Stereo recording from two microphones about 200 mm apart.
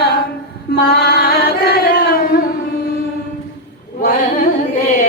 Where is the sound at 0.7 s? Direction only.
50° left (ahead or behind).